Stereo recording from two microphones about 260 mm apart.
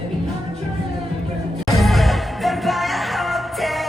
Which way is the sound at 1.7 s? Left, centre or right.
Centre.